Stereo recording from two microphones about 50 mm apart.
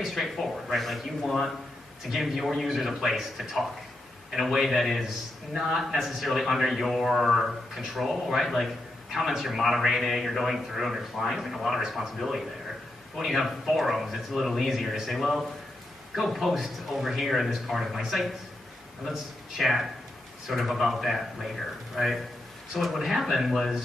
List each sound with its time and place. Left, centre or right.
0.0 s a man's voice: centre